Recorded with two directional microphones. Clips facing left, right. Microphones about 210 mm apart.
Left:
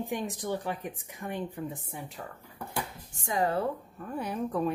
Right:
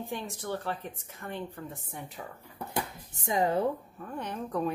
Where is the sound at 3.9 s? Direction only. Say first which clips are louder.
Left 3 dB; 5° left (ahead or behind).